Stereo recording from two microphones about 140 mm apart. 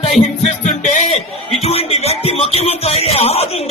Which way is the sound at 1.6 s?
45° left (ahead or behind).